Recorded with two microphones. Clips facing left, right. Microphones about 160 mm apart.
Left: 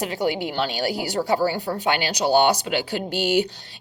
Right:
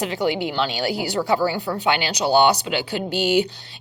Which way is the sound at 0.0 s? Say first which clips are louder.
Right 2 dB; 40° left (ahead or behind).